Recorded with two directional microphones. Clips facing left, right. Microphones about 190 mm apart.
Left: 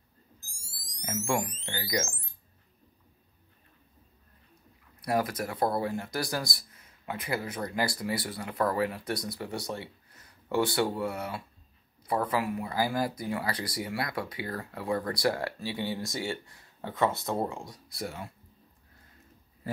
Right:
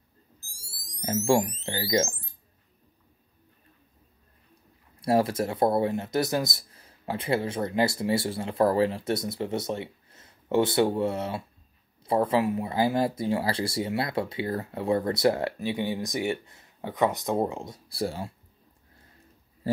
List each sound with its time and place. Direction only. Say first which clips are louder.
1.0 s speech: right 7 dB; 30° right (ahead or behind)
5.0 s speech: right 6 dB; 30° right (ahead or behind)